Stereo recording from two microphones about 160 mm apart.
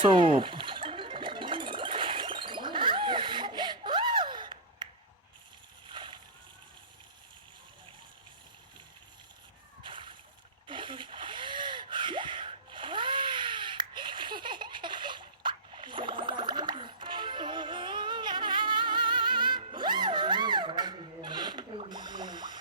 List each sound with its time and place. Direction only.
0.0 s music: 30° right (ahead or behind)
5.9 s slosh: 30° right (ahead or behind)
9.8 s splash: 30° right (ahead or behind)
10.7 s gasp: 30° right (ahead or behind)
19.7 s music: 30° right (ahead or behind)